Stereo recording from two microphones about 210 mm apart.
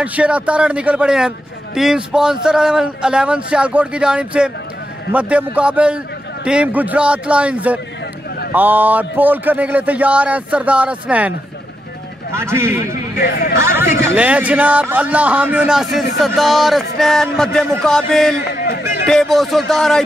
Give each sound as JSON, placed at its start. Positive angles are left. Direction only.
{"t": 0.0, "sound": "a man's voice", "side_deg": -5}
{"t": 12.4, "sound": "a man's voice", "side_deg": -10}